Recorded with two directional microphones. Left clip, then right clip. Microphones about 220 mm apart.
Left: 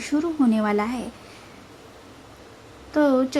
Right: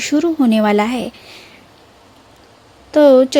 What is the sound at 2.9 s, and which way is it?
Speech, 55° right (ahead or behind).